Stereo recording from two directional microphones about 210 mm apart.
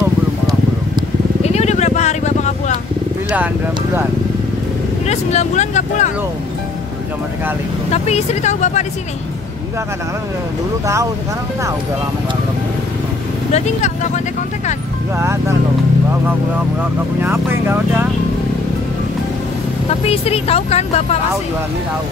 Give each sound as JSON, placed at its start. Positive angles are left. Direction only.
{"t": 1.4, "sound": "vehicle", "side_deg": 30}
{"t": 5.0, "sound": "speech", "side_deg": 30}
{"t": 7.9, "sound": "speech", "side_deg": 30}
{"t": 13.5, "sound": "speech", "side_deg": 30}
{"t": 15.1, "sound": "speech", "side_deg": -10}
{"t": 17.2, "sound": "speech", "side_deg": -10}
{"t": 20.1, "sound": "speech", "side_deg": 30}